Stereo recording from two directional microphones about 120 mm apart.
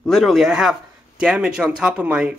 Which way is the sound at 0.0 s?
Centre (ahead or behind).